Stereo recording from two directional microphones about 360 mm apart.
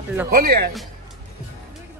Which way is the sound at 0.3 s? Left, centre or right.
Right.